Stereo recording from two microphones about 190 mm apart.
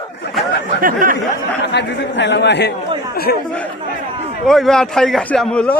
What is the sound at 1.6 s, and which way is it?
Speech, 65° left (ahead or behind).